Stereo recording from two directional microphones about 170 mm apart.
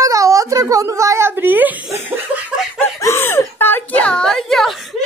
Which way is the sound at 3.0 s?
15° left (ahead or behind).